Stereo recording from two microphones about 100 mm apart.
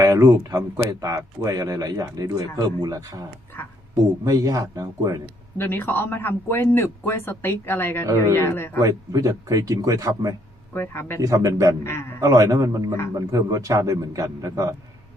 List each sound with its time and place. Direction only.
0.0 s speech: 35° right (ahead or behind)
3.5 s speech: 20° left (ahead or behind)
4.2 s speech: 35° right (ahead or behind)
5.5 s speech: 20° left (ahead or behind)
8.8 s speech: 35° right (ahead or behind)
10.8 s speech: 25° left (ahead or behind)
11.2 s speech: 35° right (ahead or behind)
11.8 s speech: 25° left (ahead or behind)
12.2 s speech: 35° right (ahead or behind)